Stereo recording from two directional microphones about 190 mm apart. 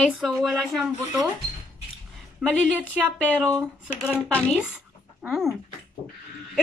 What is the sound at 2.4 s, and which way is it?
Speech, 5° right (ahead or behind).